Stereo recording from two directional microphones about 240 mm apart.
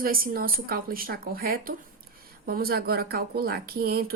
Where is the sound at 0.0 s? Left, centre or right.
Right.